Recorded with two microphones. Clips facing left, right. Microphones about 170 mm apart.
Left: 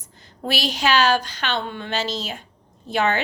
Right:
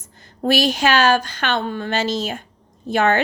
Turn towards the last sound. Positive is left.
turn(degrees=-50)  # may be behind; listen again after turning